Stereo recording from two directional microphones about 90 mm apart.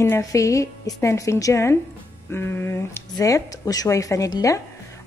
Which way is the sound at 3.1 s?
40° left (ahead or behind).